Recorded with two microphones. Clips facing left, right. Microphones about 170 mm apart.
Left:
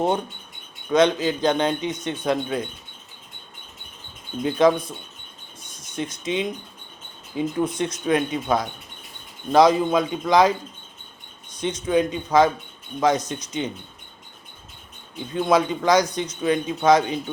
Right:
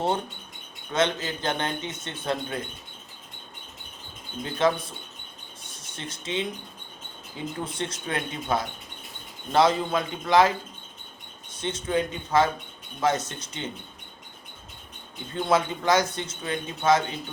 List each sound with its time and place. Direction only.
0.9 s speech: 15° left (ahead or behind)
4.4 s speech: 15° left (ahead or behind)
5.7 s speech: 15° left (ahead or behind)
11.5 s speech: 15° left (ahead or behind)
15.4 s speech: 15° left (ahead or behind)